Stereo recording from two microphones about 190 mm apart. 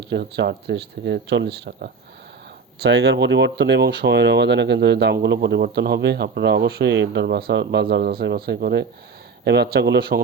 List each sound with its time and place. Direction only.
0.0 s speech: 60° right (ahead or behind)